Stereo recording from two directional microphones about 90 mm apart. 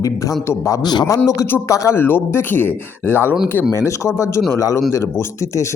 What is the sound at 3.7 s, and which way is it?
A man's voice, 35° left (ahead or behind).